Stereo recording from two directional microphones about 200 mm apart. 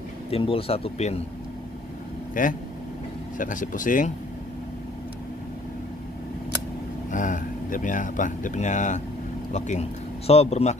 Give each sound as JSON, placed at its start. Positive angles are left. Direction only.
{"t": 0.3, "sound": "speech", "side_deg": 30}
{"t": 2.4, "sound": "speech", "side_deg": 40}
{"t": 7.1, "sound": "speech", "side_deg": 40}